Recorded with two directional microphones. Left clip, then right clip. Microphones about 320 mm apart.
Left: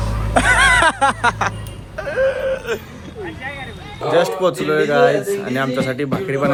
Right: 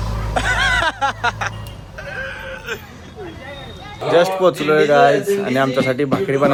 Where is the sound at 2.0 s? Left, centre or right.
Centre.